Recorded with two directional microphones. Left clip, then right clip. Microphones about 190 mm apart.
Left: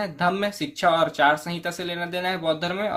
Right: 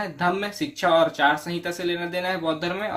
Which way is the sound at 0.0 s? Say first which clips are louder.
Left 1 dB; 40° left (ahead or behind).